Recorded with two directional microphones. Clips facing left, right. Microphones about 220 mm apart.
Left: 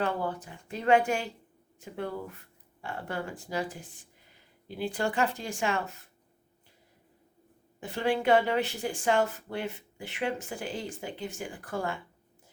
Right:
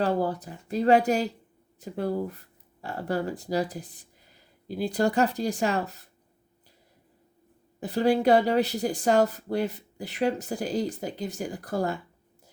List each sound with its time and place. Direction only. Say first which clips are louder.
0.0 s speech: right 5 dB; 35° right (ahead or behind)
7.8 s speech: right 6 dB; 35° right (ahead or behind)